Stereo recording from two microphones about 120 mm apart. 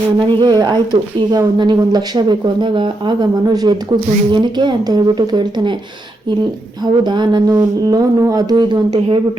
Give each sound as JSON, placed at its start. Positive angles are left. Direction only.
{"t": 0.2, "sound": "speech", "side_deg": -40}
{"t": 7.0, "sound": "speech", "side_deg": -40}